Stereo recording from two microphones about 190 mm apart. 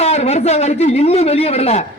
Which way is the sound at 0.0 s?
35° left (ahead or behind).